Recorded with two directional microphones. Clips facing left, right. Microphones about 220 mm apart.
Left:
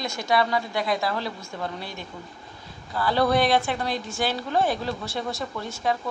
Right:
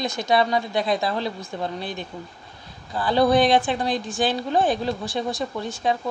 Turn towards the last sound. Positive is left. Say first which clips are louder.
# right 2 dB
turn(degrees=-20)  # may be behind; listen again after turning